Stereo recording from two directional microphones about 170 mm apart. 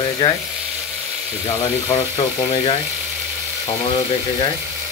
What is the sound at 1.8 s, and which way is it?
Speech, 25° left (ahead or behind).